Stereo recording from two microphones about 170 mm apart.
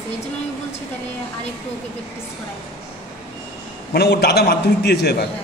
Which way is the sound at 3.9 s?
75° left (ahead or behind).